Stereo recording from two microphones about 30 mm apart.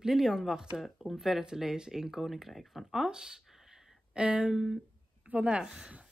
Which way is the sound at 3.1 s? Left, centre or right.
Right.